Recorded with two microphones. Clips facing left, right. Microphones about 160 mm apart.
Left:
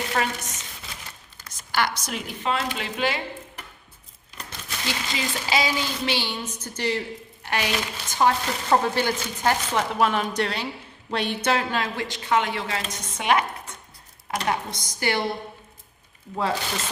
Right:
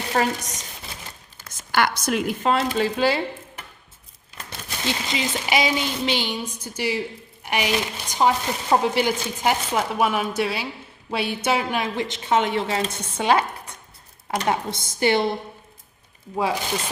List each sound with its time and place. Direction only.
0.1 s chopping: 35° right (ahead or behind)
1.4 s speech: 55° right (ahead or behind); by 3.2 s 35° right (ahead or behind)
4.4 s a woman's voice: 20° right (ahead or behind)
16.3 s speech: 15° right (ahead or behind)